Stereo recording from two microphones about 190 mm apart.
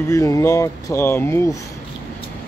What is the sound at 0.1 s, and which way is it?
Speech, 15° left (ahead or behind).